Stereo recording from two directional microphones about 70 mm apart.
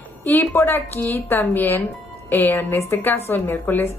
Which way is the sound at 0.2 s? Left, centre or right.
Left.